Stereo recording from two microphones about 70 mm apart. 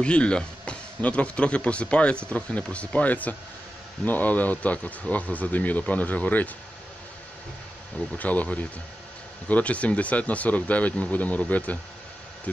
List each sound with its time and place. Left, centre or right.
0.0 s speech: centre
8.2 s speech: left